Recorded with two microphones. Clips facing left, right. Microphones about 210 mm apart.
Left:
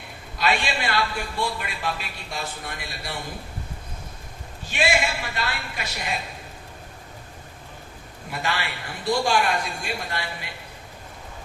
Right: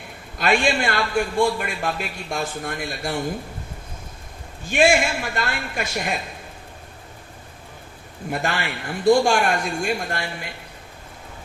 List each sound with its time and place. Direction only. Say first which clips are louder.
0.3 s a man's voice: right 5 dB; 50° right (ahead or behind)
4.7 s a man's voice: right 6 dB; 50° right (ahead or behind)
8.3 s a man's voice: right 4 dB; 50° right (ahead or behind)